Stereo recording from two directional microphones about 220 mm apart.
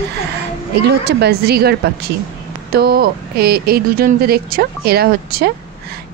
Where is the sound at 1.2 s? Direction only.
45° right (ahead or behind).